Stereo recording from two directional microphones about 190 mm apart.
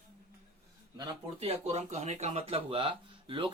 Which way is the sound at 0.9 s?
25° right (ahead or behind).